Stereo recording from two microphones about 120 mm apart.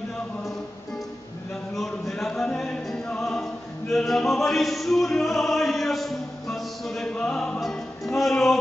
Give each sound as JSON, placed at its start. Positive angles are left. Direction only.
{"t": 1.8, "sound": "music", "side_deg": 5}